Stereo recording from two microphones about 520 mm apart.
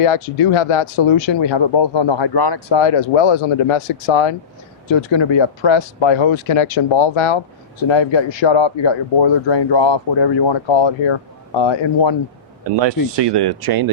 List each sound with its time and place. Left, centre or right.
0.0 s speech: left
13.1 s speech: right